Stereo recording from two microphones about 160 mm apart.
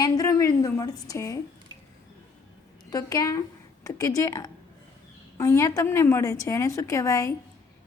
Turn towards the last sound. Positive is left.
turn(degrees=20)  # may be behind; listen again after turning